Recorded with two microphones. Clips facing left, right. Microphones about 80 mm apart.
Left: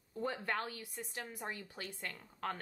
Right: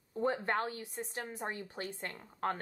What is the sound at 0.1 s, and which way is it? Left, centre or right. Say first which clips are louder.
A woman's voice: right 5 dB; right.